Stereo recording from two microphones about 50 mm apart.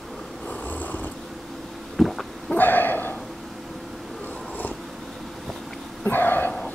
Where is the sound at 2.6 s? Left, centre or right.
Left.